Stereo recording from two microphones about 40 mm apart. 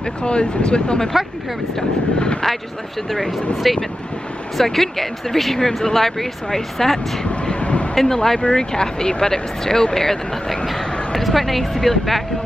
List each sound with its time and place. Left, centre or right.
0.0 s speech: left
3.1 s speech: centre
7.4 s vehicle: left
7.9 s speech: centre